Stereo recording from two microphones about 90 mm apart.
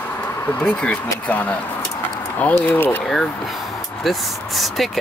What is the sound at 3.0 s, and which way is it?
Speech, 5° left (ahead or behind).